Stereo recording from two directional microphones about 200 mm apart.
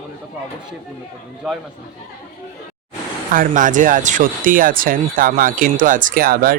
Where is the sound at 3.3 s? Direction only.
40° right (ahead or behind).